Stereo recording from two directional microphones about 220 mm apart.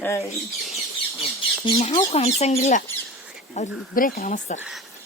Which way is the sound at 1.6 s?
20° left (ahead or behind).